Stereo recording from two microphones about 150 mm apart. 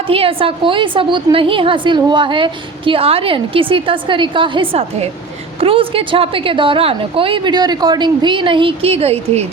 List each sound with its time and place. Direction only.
0.1 s a woman's voice: 40° right (ahead or behind)